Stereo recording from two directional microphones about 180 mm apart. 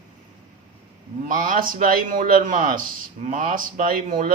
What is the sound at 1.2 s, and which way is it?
Speech, 50° right (ahead or behind).